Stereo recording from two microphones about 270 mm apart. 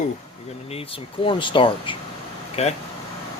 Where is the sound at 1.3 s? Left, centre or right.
Centre.